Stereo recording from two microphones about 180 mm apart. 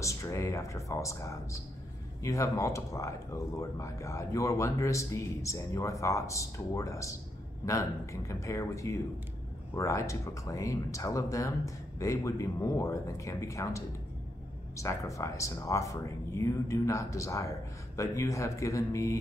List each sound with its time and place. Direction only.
0.0 s speech: 15° left (ahead or behind)